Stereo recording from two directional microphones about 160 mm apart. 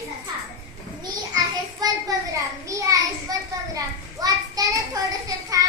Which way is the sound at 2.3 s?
20° right (ahead or behind).